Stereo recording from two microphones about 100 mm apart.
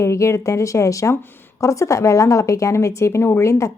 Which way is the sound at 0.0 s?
30° left (ahead or behind).